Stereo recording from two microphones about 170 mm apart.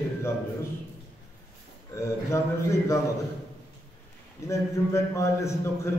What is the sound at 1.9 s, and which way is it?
A man's voice, 15° left (ahead or behind).